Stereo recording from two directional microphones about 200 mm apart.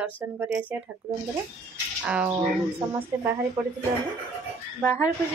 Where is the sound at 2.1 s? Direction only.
5° right (ahead or behind).